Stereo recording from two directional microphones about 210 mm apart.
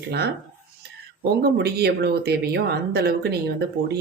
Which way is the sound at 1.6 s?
50° right (ahead or behind).